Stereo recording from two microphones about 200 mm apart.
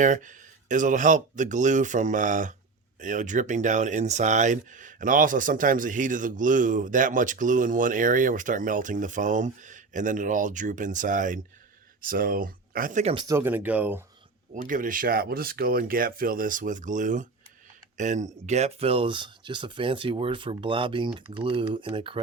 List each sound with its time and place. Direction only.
0.0 s speech: 40° right (ahead or behind)
13.2 s speech: 10° right (ahead or behind)
14.5 s speech: 40° right (ahead or behind); by 22.2 s 25° right (ahead or behind)